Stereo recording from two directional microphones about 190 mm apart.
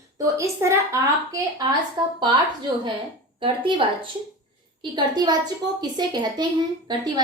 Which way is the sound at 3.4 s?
25° right (ahead or behind).